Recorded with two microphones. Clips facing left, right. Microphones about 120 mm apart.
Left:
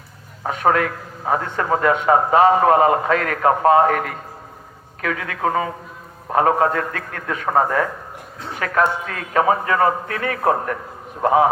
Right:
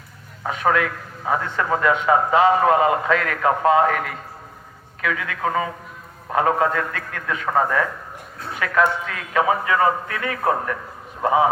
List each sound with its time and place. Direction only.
0.4 s a man's voice: 40° left (ahead or behind)